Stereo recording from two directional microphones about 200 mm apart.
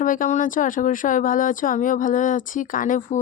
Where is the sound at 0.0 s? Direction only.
40° left (ahead or behind).